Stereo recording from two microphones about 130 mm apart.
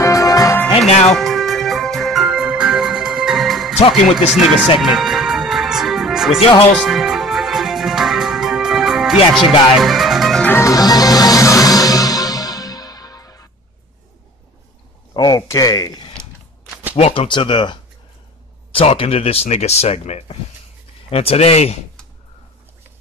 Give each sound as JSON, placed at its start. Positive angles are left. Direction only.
{"t": 0.0, "sound": "music", "side_deg": 25}
{"t": 0.7, "sound": "music", "side_deg": 55}
{"t": 1.1, "sound": "music", "side_deg": 0}
{"t": 3.7, "sound": "speech", "side_deg": 55}
{"t": 4.7, "sound": "music", "side_deg": 0}
{"t": 9.3, "sound": "speech", "side_deg": 0}
{"t": 10.4, "sound": "music", "side_deg": 20}
{"t": 15.1, "sound": "a sound", "side_deg": 30}
{"t": 16.9, "sound": "speech", "side_deg": 50}